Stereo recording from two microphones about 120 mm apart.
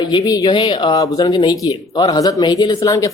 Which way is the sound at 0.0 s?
40° left (ahead or behind).